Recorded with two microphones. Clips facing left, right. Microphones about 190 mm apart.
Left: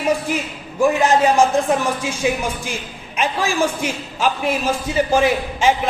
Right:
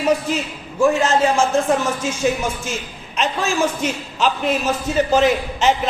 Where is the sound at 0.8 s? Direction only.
15° left (ahead or behind).